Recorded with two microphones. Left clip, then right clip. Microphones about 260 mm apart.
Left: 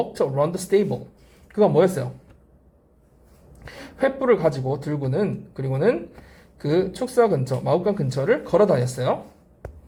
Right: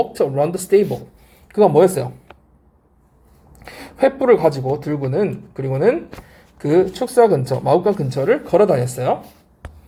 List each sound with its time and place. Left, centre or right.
0.2 s speech: right
3.7 s a woman's voice: right
6.6 s a woman's voice: right
7.9 s speech: right